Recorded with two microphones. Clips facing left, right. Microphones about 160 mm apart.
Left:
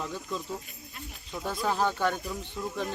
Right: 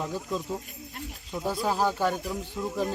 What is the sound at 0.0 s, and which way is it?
Speech, 10° right (ahead or behind).